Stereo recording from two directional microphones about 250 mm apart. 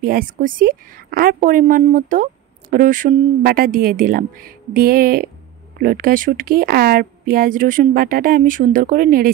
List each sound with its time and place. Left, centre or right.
0.0 s speech: right